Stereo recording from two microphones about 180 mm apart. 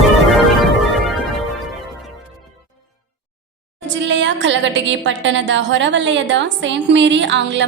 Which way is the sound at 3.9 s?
85° right.